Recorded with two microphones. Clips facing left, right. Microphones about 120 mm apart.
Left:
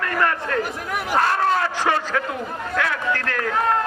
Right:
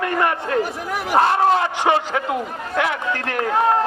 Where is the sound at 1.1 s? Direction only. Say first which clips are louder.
Right 4 dB; 25° right (ahead or behind).